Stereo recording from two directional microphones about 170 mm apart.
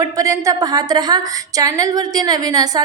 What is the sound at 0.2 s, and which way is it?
A woman's voice, 20° right (ahead or behind).